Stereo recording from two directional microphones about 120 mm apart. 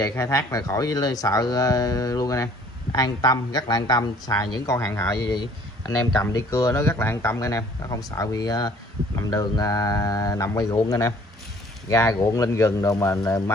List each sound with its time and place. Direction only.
0.1 s speech: 25° left (ahead or behind)
5.3 s speech: 35° left (ahead or behind)